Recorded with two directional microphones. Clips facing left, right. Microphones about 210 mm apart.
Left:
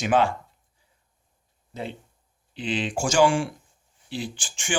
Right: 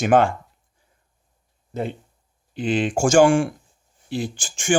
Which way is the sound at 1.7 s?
50° right (ahead or behind).